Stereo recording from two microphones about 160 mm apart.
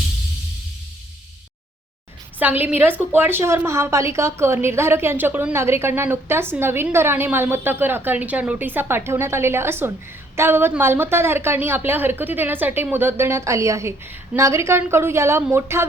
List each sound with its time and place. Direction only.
2.4 s a woman's voice: 10° right (ahead or behind)